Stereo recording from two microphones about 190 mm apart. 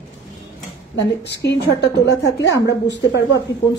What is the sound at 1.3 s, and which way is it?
A woman's voice, 60° left (ahead or behind).